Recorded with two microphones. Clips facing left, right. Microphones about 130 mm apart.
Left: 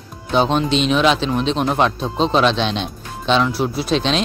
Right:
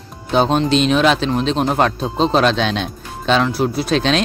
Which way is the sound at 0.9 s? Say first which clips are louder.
Right 1 dB; 45° right (ahead or behind).